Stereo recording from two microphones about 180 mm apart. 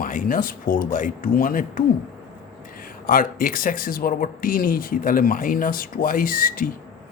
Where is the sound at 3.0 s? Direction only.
50° left (ahead or behind).